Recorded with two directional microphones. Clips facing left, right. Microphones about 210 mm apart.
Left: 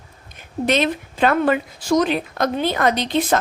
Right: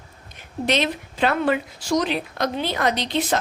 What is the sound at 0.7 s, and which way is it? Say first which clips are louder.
A woman's voice: left 3 dB; 50° left (ahead or behind).